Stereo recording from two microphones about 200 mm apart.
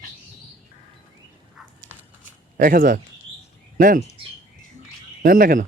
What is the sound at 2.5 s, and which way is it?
Speech, 45° right (ahead or behind).